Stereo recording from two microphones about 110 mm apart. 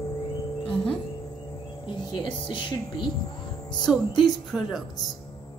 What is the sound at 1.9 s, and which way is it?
Speech, 40° left (ahead or behind).